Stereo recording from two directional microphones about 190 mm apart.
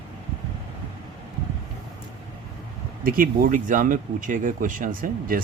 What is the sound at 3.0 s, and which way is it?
Speech, 50° right (ahead or behind).